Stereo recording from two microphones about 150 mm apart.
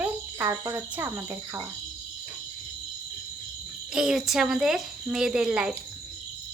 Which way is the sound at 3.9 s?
5° right (ahead or behind).